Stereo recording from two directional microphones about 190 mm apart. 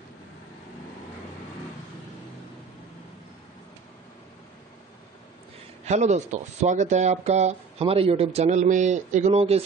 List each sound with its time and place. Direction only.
5.9 s speech: 35° right (ahead or behind)